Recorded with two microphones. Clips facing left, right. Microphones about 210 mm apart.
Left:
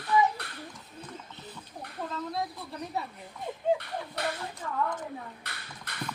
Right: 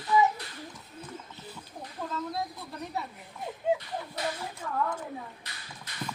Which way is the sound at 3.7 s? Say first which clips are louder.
Left 1 dB; 60° left (ahead or behind).